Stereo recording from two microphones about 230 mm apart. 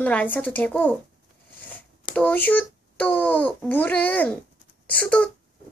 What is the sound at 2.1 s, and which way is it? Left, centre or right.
A child's voice, centre.